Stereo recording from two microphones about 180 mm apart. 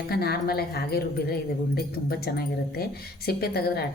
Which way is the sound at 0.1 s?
60° left (ahead or behind).